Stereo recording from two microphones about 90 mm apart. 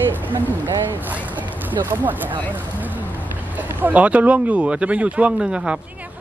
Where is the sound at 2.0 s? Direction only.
20° right (ahead or behind).